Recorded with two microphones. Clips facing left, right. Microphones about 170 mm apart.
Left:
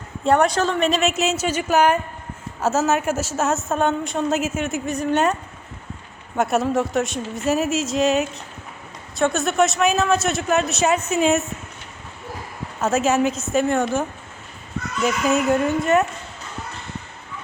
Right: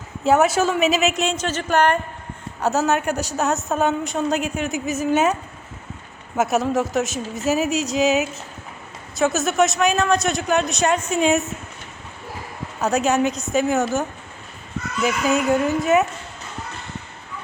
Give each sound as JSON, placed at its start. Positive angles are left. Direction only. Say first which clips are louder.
{"t": 0.3, "sound": "a woman's voice", "louder": "right 1 dB", "side_deg": -5}
{"t": 6.3, "sound": "a woman's voice", "louder": "even", "side_deg": 0}
{"t": 12.8, "sound": "a woman's voice", "louder": "even", "side_deg": 0}
{"t": 15.0, "sound": "a woman's voice", "louder": "even", "side_deg": 0}